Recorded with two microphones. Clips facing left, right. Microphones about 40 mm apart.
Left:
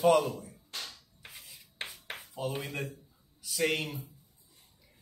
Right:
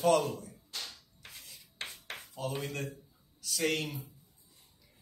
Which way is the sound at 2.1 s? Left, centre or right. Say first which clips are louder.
Left 2 dB; centre.